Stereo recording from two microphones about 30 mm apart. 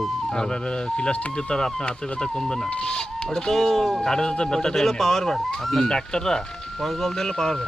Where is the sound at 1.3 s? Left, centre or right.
Left; by 4.0 s centre.